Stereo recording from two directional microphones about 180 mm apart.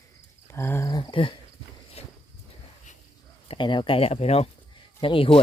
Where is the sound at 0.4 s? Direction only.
15° left (ahead or behind); by 2.1 s 35° left (ahead or behind).